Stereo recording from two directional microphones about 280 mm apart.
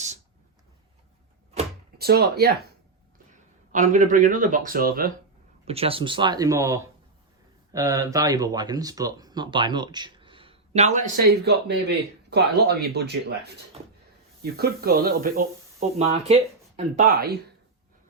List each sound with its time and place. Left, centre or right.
2.0 s speech: right
3.7 s speech: right
5.6 s speech: right